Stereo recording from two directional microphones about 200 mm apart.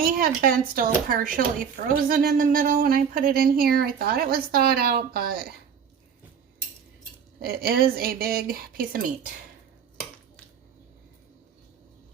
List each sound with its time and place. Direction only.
0.0 s speech: 45° right (ahead or behind)
7.3 s speech: 50° right (ahead or behind)